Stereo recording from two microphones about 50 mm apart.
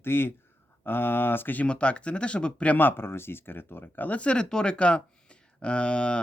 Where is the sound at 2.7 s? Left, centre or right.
Left.